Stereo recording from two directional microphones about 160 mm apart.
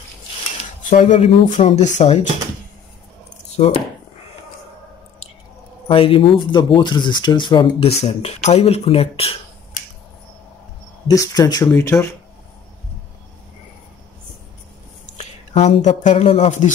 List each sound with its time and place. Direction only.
0.9 s speech: 40° left (ahead or behind)
3.6 s speech: 35° left (ahead or behind)
5.9 s speech: 35° left (ahead or behind)
11.1 s speech: 25° left (ahead or behind)
15.1 s a sound: 45° left (ahead or behind)
16.0 s speech: 50° left (ahead or behind)